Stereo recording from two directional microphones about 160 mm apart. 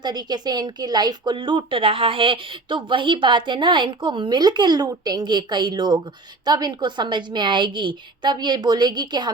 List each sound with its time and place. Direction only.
0.0 s a woman's voice: 25° right (ahead or behind)